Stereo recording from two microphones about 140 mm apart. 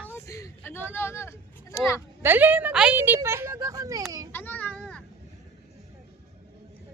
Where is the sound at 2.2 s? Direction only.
15° right (ahead or behind).